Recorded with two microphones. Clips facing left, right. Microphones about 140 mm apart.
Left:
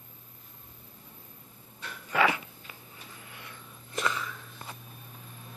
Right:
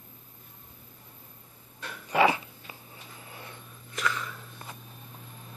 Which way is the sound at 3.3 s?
30° right (ahead or behind).